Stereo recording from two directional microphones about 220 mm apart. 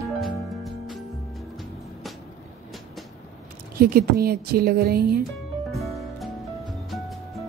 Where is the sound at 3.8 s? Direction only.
45° right (ahead or behind).